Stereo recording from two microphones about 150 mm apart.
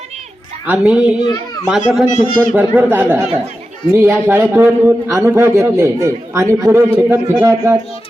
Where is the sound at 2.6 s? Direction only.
10° right (ahead or behind).